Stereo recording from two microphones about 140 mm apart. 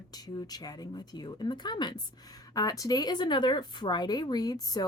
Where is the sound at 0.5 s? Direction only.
30° left (ahead or behind).